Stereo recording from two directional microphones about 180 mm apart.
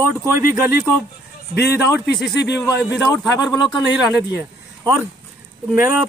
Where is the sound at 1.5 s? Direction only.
65° left (ahead or behind).